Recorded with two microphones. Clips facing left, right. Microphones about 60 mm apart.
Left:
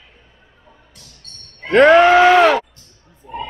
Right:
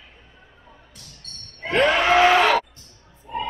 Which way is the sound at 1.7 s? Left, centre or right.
Left.